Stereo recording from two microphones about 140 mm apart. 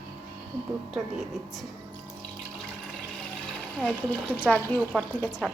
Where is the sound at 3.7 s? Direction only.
10° left (ahead or behind).